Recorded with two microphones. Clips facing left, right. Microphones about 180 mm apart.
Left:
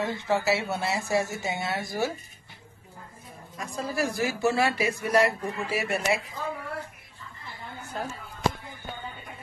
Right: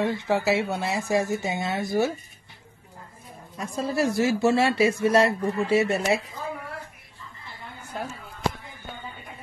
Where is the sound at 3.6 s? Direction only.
25° right (ahead or behind).